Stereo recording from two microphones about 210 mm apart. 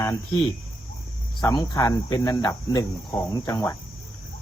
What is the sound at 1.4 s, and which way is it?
Speech, 20° left (ahead or behind).